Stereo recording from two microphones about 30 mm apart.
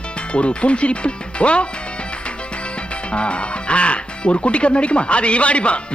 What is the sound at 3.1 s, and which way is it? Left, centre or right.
Speech, left.